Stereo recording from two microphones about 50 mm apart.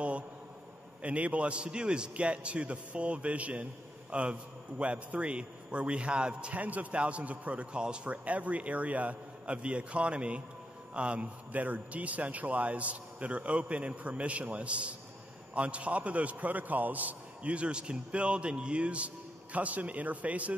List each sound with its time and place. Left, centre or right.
1.0 s a man's voice: right